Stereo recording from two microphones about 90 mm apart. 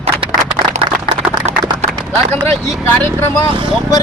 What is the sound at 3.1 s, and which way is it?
Speech, 25° left (ahead or behind).